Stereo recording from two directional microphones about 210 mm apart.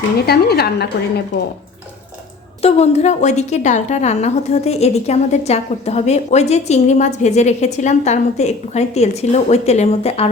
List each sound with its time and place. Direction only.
0.3 s a woman's voice: 50° left (ahead or behind)
2.6 s a woman's voice: 30° left (ahead or behind)